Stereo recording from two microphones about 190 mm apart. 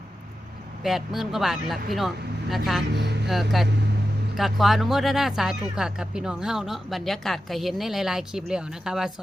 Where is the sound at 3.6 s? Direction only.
Centre (ahead or behind).